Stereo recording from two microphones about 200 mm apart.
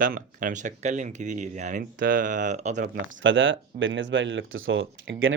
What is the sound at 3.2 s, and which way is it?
Speech, 70° right (ahead or behind).